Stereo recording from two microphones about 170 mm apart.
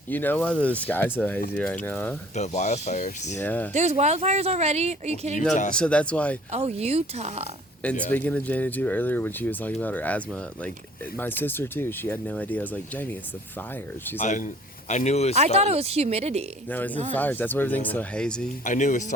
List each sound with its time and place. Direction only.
0.1 s speech: 10° left (ahead or behind)
2.3 s speech: 40° left (ahead or behind)
3.4 s speech: 10° left (ahead or behind)
3.7 s speech: 40° right (ahead or behind)
5.7 s speech: 5° left (ahead or behind)
6.5 s speech: 40° right (ahead or behind)
8.0 s speech: 10° left (ahead or behind)
14.2 s speech: 45° left (ahead or behind)
15.4 s speech: 40° right (ahead or behind)
16.6 s speech: 10° left (ahead or behind)
18.6 s speech: 50° left (ahead or behind)